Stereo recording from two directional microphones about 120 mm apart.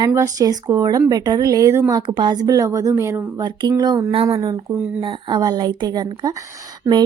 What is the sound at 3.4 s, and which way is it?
A woman's voice, 35° right (ahead or behind).